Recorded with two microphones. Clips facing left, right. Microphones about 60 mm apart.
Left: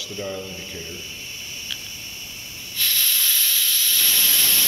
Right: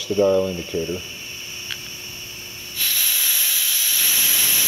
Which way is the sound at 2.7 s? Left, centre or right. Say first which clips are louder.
Left 1 dB; centre.